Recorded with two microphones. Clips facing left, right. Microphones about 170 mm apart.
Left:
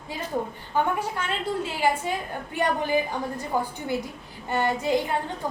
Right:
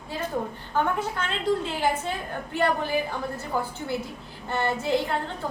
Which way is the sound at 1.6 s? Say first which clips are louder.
Left 1 dB; 10° left (ahead or behind).